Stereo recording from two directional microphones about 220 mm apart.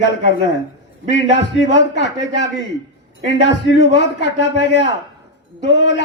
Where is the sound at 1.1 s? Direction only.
55° left (ahead or behind).